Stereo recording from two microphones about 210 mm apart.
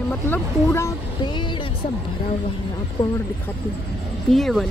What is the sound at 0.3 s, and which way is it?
Speech, 10° left (ahead or behind).